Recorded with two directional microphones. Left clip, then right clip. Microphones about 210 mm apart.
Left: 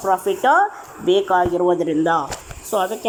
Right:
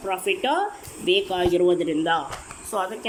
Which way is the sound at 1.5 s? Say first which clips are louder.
Left 3 dB; 10° right (ahead or behind).